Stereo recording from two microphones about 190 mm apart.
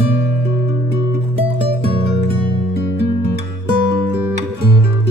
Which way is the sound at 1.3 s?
30° right (ahead or behind).